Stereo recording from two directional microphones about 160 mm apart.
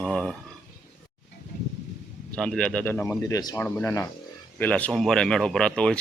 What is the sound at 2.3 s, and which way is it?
Speech, 5° left (ahead or behind).